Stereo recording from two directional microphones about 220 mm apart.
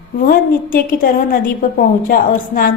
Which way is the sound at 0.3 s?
40° left (ahead or behind).